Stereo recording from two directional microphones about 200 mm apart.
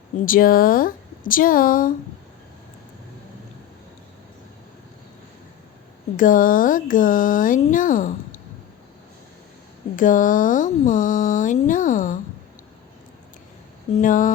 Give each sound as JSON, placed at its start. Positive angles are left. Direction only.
{"t": 0.3, "sound": "speech", "side_deg": 45}
{"t": 6.1, "sound": "speech", "side_deg": 45}
{"t": 9.9, "sound": "speech", "side_deg": 40}
{"t": 13.9, "sound": "speech", "side_deg": 40}